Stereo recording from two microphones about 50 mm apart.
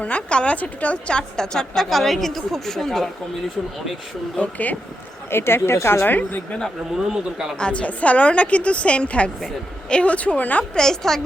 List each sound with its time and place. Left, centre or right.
0.0 s a woman's voice: left; by 3.1 s centre
4.4 s speech: left
5.3 s a woman's voice: left
6.1 s speech: left
7.1 s speech: centre
7.6 s a woman's voice: left
10.8 s a woman's voice: centre